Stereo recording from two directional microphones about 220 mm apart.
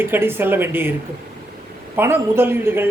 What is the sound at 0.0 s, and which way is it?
Speech, 10° right (ahead or behind).